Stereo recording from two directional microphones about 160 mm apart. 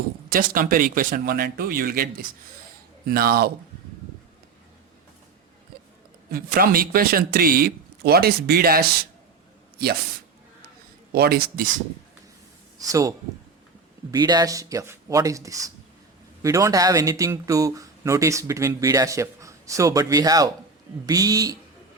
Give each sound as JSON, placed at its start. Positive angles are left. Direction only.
{"t": 0.3, "sound": "speech", "side_deg": -60}
{"t": 5.7, "sound": "music", "side_deg": -80}
{"t": 6.3, "sound": "speech", "side_deg": -65}
{"t": 11.1, "sound": "speech", "side_deg": -75}
{"t": 12.9, "sound": "speech", "side_deg": -20}